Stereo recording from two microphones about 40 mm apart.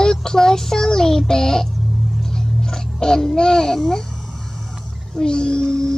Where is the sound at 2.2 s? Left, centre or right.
Centre.